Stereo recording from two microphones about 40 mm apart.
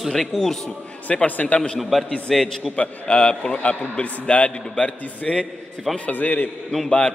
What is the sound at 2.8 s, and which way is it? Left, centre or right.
A man's voice, left.